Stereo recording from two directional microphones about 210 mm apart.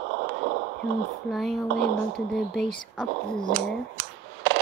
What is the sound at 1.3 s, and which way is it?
Speech, centre (ahead or behind).